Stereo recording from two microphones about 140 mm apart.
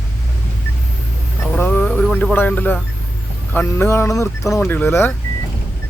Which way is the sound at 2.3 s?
15° left (ahead or behind).